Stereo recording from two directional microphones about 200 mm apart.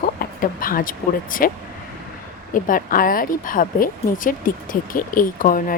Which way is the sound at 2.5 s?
45° left (ahead or behind).